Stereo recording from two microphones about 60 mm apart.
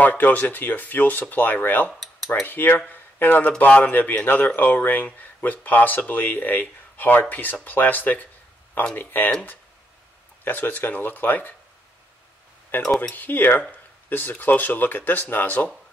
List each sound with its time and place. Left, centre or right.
0.0 s speech: left
2.0 s a sound: centre
2.4 s speech: left
10.4 s speech: left
12.8 s speech: centre
13.1 s speech: left